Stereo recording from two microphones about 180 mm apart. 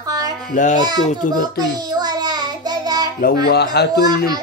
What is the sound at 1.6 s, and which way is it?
Child singing, 25° right (ahead or behind).